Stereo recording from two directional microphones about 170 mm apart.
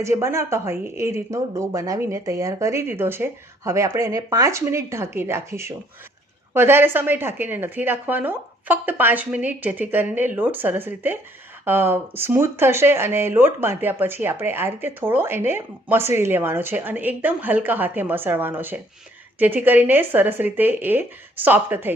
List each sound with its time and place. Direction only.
0.0 s speech: 15° right (ahead or behind)